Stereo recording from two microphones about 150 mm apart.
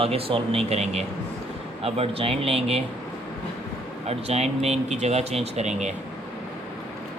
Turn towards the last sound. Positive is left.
turn(degrees=-50)  # may be behind; listen again after turning